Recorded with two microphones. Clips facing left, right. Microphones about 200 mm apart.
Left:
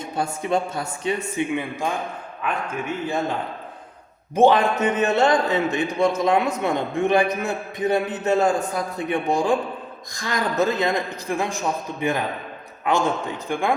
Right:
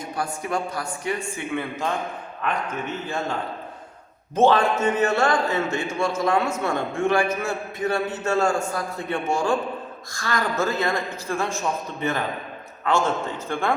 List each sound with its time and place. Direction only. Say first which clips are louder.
0.0 s a man's voice: left 2 dB; 25° left (ahead or behind)
4.4 s a man's voice: left 2 dB; 15° left (ahead or behind)